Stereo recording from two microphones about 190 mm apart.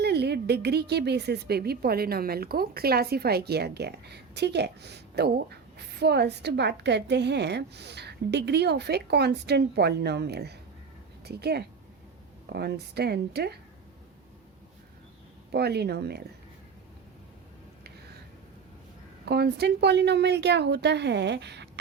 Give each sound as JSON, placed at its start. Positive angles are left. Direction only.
{"t": 0.0, "sound": "a woman's voice", "side_deg": -60}
{"t": 15.5, "sound": "a woman's voice", "side_deg": -60}
{"t": 19.2, "sound": "a woman's voice", "side_deg": -60}